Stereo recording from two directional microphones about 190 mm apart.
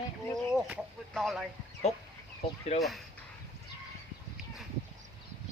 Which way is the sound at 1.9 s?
35° left (ahead or behind).